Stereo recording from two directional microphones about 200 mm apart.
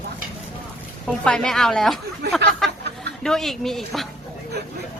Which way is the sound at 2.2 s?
55° right (ahead or behind).